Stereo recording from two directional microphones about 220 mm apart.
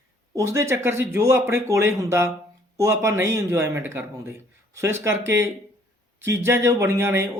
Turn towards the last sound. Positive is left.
turn(degrees=-10)  # may be behind; listen again after turning